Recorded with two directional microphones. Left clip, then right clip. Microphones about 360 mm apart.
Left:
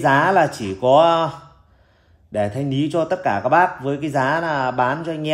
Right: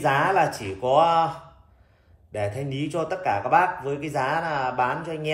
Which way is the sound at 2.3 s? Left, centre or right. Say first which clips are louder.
Left 7 dB; left.